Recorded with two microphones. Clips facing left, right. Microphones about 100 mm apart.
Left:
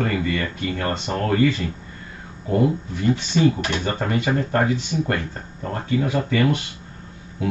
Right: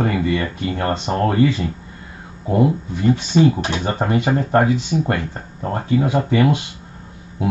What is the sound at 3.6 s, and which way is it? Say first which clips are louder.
Speech: right 3 dB; 15° right (ahead or behind).